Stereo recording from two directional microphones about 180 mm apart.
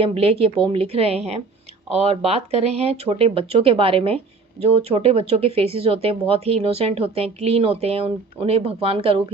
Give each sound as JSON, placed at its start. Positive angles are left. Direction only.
{"t": 0.0, "sound": "speech", "side_deg": -30}